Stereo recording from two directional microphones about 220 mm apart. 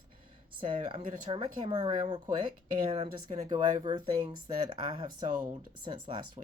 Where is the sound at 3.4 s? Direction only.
20° right (ahead or behind).